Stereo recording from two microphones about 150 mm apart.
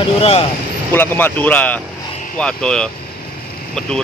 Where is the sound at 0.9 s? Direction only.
15° left (ahead or behind).